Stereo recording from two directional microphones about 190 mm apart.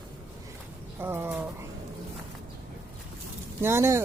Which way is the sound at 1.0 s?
10° right (ahead or behind).